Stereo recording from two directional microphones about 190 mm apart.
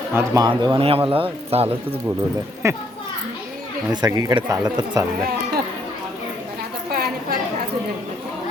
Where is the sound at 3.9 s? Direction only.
20° right (ahead or behind).